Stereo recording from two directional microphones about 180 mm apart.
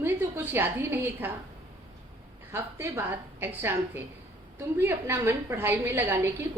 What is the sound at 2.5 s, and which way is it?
A woman's voice, 15° right (ahead or behind).